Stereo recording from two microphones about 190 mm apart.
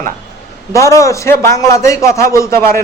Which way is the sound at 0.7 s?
15° left (ahead or behind).